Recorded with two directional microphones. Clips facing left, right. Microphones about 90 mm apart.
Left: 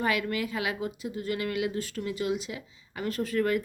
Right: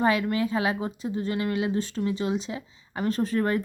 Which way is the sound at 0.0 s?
30° right (ahead or behind).